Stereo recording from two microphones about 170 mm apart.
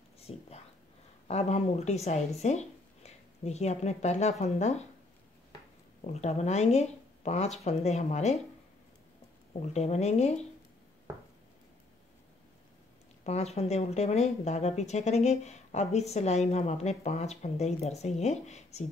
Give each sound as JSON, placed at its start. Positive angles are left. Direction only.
{"t": 0.3, "sound": "speech", "side_deg": 35}
{"t": 6.1, "sound": "speech", "side_deg": 40}
{"t": 9.5, "sound": "speech", "side_deg": 40}
{"t": 13.2, "sound": "speech", "side_deg": 40}